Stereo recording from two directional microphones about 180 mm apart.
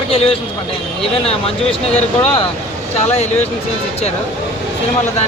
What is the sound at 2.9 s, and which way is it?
Speech, 35° left (ahead or behind).